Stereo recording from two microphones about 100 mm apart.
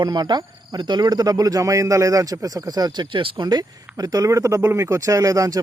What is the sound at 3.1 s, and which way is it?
Speech, 60° right (ahead or behind).